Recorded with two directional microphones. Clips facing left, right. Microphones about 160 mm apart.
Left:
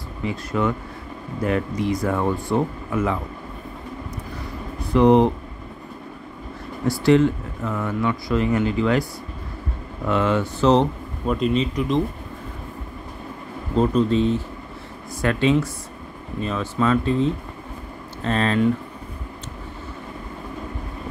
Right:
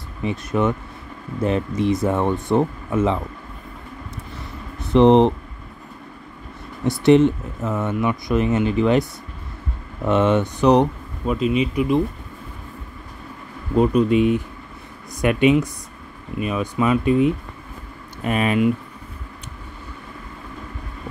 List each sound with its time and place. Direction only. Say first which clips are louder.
0.2 s speech: right 2 dB; 20° right (ahead or behind)
4.7 s speech: right 2 dB; 20° right (ahead or behind)
6.8 s speech: right 3 dB; 20° right (ahead or behind)
10.0 s speech: right 3 dB; 20° right (ahead or behind)
11.2 s speech: right 1 dB; 5° right (ahead or behind)
13.7 s speech: right 2 dB; 10° right (ahead or behind)
15.4 s speech: right 3 dB; 15° right (ahead or behind)